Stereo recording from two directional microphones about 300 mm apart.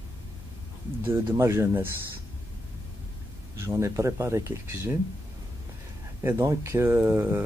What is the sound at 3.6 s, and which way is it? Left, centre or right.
Speech, centre.